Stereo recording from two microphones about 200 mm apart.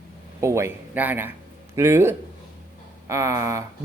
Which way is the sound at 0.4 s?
15° right (ahead or behind).